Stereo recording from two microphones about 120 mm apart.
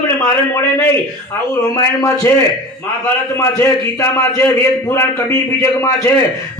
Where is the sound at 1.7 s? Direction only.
30° left (ahead or behind).